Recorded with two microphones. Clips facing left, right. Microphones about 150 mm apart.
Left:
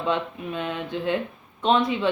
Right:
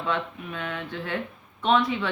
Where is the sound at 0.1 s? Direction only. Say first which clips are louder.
Left 3 dB; 20° left (ahead or behind).